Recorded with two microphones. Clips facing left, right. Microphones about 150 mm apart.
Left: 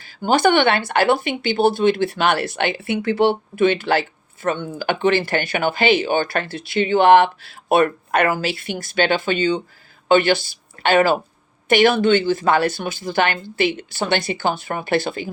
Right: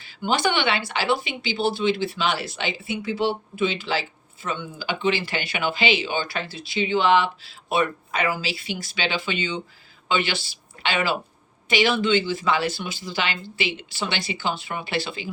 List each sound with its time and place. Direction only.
0.0 s speech: 45° left (ahead or behind)